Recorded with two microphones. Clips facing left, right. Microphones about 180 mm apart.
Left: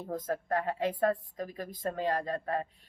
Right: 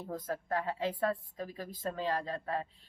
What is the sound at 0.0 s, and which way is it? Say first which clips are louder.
Speech: left 4 dB; 40° left (ahead or behind).